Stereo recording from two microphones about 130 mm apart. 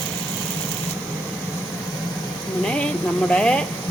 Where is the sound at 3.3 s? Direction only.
5° left (ahead or behind).